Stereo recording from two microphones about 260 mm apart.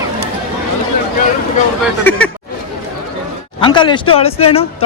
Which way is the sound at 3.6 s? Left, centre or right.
Centre.